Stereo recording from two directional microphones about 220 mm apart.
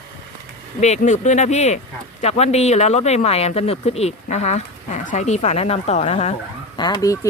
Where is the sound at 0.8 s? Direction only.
30° left (ahead or behind).